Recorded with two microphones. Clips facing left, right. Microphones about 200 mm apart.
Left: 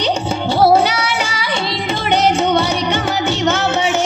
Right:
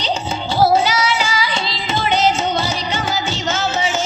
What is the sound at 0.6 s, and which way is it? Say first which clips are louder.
Music: left 2 dB; 60° left (ahead or behind).